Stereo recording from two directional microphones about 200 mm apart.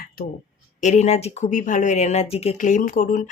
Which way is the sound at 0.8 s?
35° left (ahead or behind).